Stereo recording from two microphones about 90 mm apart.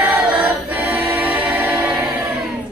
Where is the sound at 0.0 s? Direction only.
15° right (ahead or behind).